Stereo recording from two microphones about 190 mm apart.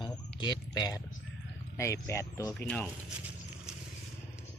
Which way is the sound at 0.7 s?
20° left (ahead or behind).